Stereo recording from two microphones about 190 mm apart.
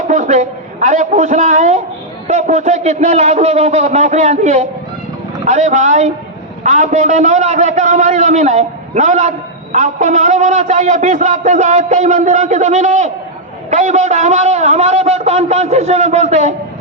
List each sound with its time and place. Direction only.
0.1 s a man's voice: 40° right (ahead or behind)